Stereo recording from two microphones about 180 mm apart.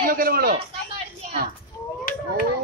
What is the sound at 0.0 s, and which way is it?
Speech, 55° right (ahead or behind).